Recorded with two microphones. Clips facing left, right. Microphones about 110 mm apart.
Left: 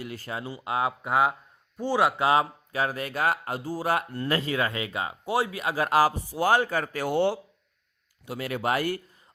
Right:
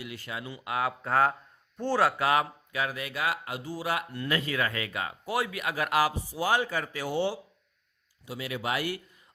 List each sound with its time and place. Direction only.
0.0 s speech: 40° left (ahead or behind)
6.3 s speech: 50° left (ahead or behind)